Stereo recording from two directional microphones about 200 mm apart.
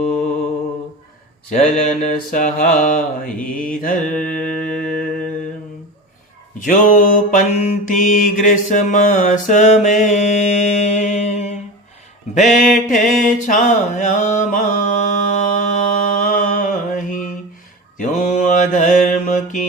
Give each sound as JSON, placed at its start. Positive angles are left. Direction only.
{"t": 1.5, "sound": "mantra", "side_deg": 35}
{"t": 4.4, "sound": "mantra", "side_deg": 5}
{"t": 6.6, "sound": "mantra", "side_deg": 40}